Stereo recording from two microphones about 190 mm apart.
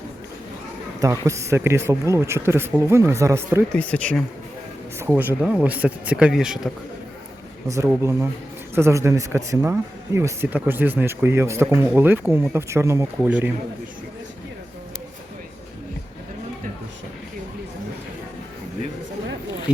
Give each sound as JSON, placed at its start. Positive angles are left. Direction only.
{"t": 0.9, "sound": "speech", "side_deg": -20}
{"t": 3.8, "sound": "speech", "side_deg": 5}
{"t": 4.9, "sound": "speech", "side_deg": -10}
{"t": 7.7, "sound": "speech", "side_deg": -15}